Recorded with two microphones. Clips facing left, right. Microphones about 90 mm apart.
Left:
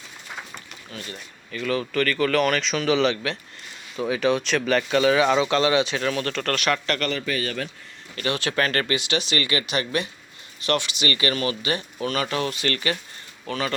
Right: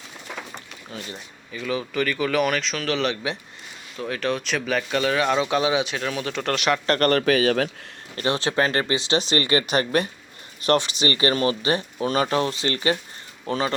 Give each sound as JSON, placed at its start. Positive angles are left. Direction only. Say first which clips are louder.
{"t": 0.9, "sound": "speech", "louder": "right 1 dB", "side_deg": -25}
{"t": 1.5, "sound": "speech", "louder": "left 1 dB", "side_deg": -10}
{"t": 6.3, "sound": "speech", "louder": "right 1 dB", "side_deg": -15}
{"t": 7.0, "sound": "a man's voice", "louder": "right 8 dB", "side_deg": -65}
{"t": 8.1, "sound": "speech", "louder": "right 2 dB", "side_deg": -30}